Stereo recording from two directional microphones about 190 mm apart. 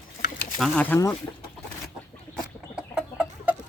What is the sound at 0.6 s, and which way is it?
Speech, 5° left (ahead or behind).